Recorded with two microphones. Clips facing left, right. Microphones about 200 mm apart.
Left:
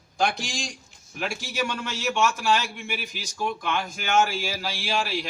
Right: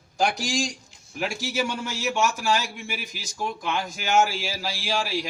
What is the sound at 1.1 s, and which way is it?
A man's voice, 10° right (ahead or behind).